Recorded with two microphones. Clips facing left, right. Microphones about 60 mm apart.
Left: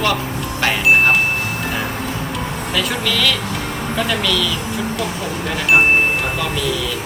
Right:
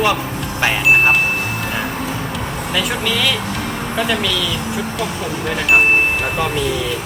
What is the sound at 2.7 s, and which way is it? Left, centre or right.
Speech, centre.